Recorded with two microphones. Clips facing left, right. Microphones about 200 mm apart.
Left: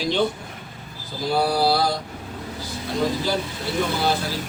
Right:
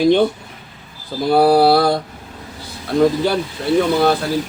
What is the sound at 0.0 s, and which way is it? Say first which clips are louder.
Speech: right 9 dB; 55° right (ahead or behind).